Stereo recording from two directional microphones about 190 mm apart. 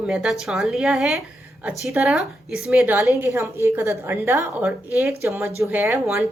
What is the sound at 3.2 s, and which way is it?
Speech, 15° right (ahead or behind).